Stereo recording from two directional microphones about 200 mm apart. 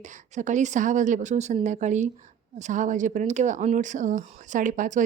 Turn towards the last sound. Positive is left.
turn(degrees=-40)  # may be behind; listen again after turning